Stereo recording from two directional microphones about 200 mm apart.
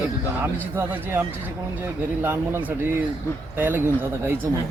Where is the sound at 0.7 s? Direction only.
10° right (ahead or behind).